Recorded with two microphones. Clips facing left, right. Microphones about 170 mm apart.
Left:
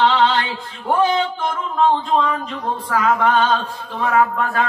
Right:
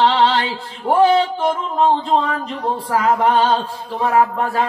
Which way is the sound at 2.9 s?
30° right (ahead or behind).